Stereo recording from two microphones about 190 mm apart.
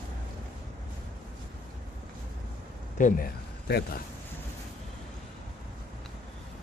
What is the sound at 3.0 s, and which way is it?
A man's voice, 45° left (ahead or behind).